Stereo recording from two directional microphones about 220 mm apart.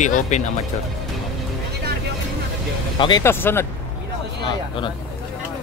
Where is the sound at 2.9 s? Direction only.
20° left (ahead or behind).